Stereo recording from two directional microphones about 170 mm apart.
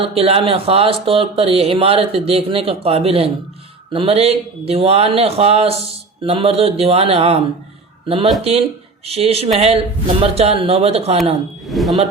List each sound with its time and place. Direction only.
0.2 s speech: 35° right (ahead or behind)
11.7 s speech: centre (ahead or behind)